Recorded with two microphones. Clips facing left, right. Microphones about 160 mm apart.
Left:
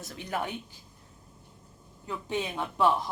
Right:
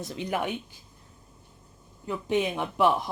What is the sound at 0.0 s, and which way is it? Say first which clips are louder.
Speech: right 4 dB; 20° right (ahead or behind).